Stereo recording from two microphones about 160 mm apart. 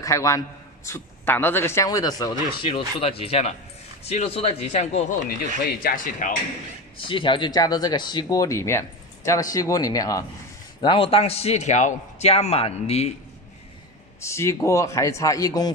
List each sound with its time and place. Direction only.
0.0 s a man's voice: 20° left (ahead or behind)
2.6 s a man's voice: 35° left (ahead or behind)
5.8 s speech: 60° left (ahead or behind)
7.0 s speech: 30° left (ahead or behind)
10.8 s a man's voice: 35° left (ahead or behind)
14.2 s speech: 15° left (ahead or behind)